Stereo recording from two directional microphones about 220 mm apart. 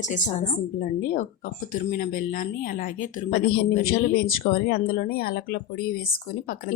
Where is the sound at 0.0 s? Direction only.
35° left (ahead or behind).